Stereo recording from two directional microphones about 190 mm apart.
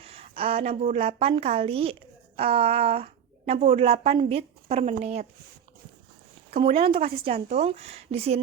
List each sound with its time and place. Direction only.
0.0 s a woman's voice: 30° right (ahead or behind)
6.7 s a woman's voice: 30° right (ahead or behind)